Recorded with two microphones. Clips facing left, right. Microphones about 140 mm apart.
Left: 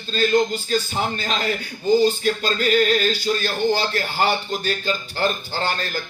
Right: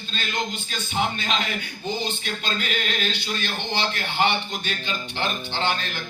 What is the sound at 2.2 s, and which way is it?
A man's voice, 40° left (ahead or behind).